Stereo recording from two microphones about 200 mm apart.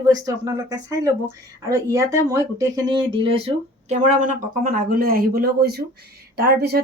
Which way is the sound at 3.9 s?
40° right (ahead or behind).